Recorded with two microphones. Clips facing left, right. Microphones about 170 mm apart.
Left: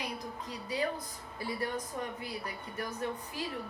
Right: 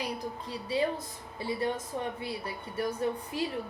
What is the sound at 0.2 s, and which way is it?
A woman's voice, 30° right (ahead or behind).